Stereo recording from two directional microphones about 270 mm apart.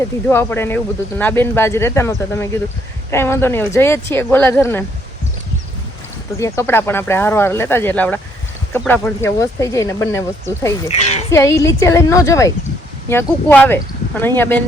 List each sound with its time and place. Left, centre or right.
0.3 s speech: centre
6.4 s speech: centre
10.8 s a sound: left
11.3 s speech: centre